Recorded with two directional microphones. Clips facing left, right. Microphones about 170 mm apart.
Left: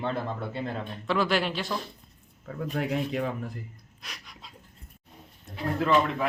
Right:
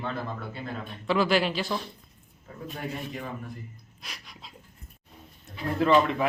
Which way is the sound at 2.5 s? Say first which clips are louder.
Left 7 dB; 80° left.